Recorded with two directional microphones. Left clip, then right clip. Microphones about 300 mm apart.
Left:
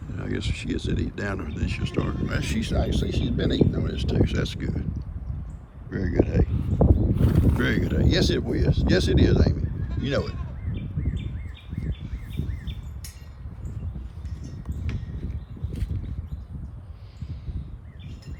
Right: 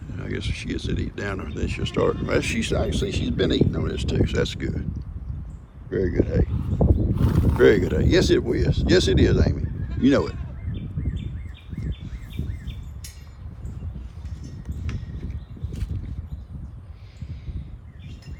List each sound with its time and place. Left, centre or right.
0.1 s speech: centre